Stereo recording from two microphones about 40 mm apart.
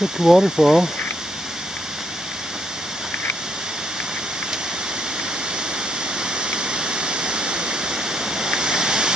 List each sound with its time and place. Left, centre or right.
0.2 s speech: centre
6.3 s waterfall: right